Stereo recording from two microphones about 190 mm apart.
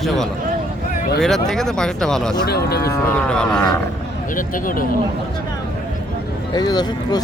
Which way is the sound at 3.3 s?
5° left (ahead or behind).